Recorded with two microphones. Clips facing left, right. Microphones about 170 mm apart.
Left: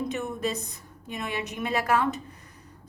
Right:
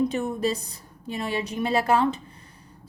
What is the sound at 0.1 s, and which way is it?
A woman's voice, 30° right (ahead or behind).